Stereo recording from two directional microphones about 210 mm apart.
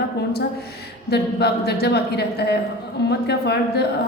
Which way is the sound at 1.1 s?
50° left (ahead or behind).